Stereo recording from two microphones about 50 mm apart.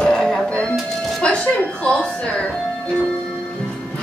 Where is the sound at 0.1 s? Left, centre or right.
Centre.